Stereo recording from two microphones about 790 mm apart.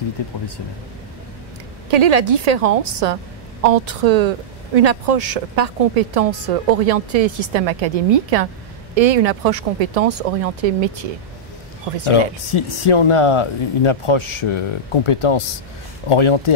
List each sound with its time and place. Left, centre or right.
1.9 s a woman's voice: right
12.1 s speech: left